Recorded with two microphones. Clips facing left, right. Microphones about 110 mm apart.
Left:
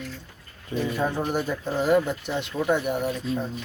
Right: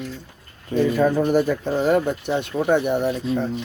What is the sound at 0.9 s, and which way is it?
Speech, 85° right.